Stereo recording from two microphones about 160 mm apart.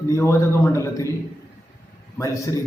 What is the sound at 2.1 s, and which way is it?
Speech, 20° left (ahead or behind).